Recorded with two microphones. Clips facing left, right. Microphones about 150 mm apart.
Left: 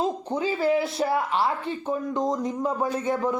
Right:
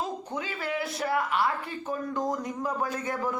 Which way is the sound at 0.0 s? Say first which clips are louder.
Left 7 dB; 30° left (ahead or behind).